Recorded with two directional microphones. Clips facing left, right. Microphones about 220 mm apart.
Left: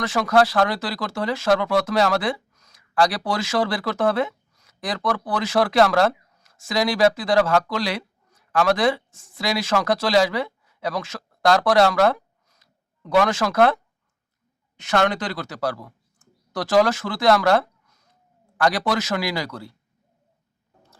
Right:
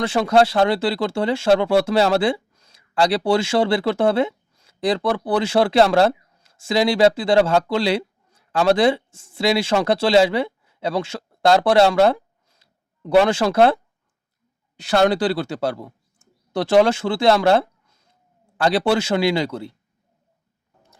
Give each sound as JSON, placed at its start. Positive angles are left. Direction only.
{"t": 0.0, "sound": "speech", "side_deg": -25}